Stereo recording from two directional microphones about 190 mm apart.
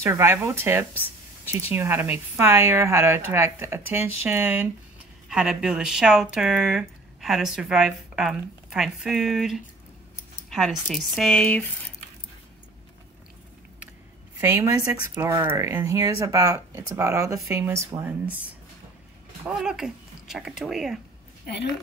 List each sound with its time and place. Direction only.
0.0 s a woman's voice: 10° right (ahead or behind); by 11.6 s 5° left (ahead or behind)
14.4 s a woman's voice: 15° right (ahead or behind)